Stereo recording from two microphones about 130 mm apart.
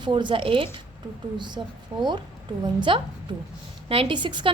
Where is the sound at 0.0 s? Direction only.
35° right (ahead or behind).